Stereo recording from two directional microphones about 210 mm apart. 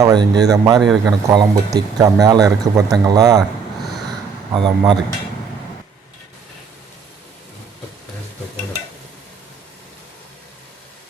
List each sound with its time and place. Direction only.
0.0 s speech: 20° right (ahead or behind)
0.8 s speech: centre (ahead or behind)
1.3 s speech: 15° right (ahead or behind)
4.5 s speech: 20° right (ahead or behind)